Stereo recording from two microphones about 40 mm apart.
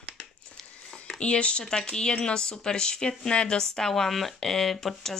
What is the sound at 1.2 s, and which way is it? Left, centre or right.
Speech, left.